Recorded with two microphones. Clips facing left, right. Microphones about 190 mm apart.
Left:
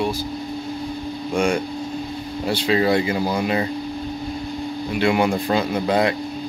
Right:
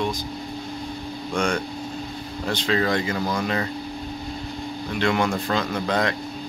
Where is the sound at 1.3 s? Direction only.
10° left (ahead or behind).